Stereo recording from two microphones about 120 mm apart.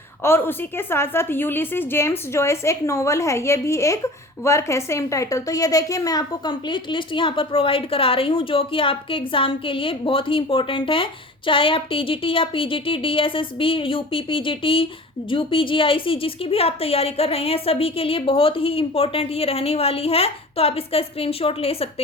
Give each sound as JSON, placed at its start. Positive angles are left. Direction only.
{"t": 0.2, "sound": "a woman's voice", "side_deg": 20}